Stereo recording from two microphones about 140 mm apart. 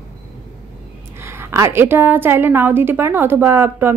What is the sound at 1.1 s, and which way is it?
A woman's voice, 20° right (ahead or behind).